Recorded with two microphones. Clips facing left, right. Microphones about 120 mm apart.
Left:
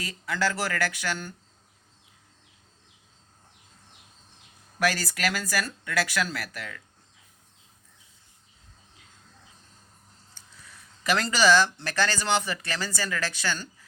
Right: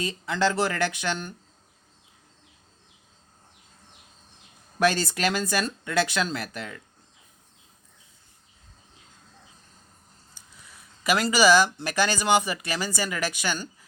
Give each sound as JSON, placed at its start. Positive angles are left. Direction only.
{"t": 0.0, "sound": "speech", "side_deg": -25}
{"t": 4.8, "sound": "speech", "side_deg": -25}
{"t": 10.3, "sound": "speech", "side_deg": -10}